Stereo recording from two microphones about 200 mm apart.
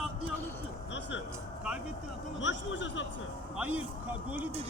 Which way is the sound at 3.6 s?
5° right (ahead or behind).